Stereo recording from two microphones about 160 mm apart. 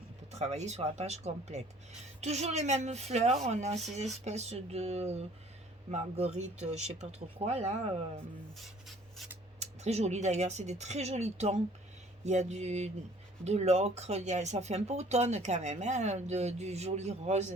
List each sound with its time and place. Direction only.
0.3 s speech: 45° right (ahead or behind)
9.6 s speech: 45° right (ahead or behind)